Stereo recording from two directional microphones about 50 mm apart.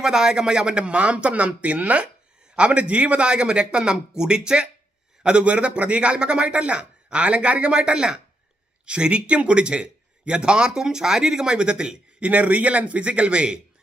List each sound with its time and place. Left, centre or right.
0.0 s a man's voice: centre
12.3 s a man's voice: right